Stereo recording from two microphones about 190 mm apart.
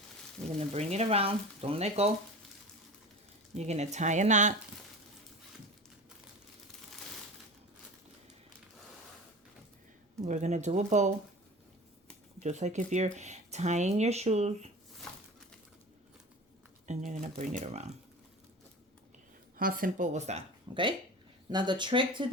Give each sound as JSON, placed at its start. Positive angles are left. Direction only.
{"t": 0.7, "sound": "speech", "side_deg": -35}
{"t": 3.5, "sound": "speech", "side_deg": -35}
{"t": 10.2, "sound": "speech", "side_deg": -40}
{"t": 12.4, "sound": "speech", "side_deg": -35}
{"t": 17.1, "sound": "speech", "side_deg": -40}
{"t": 19.5, "sound": "speech", "side_deg": -50}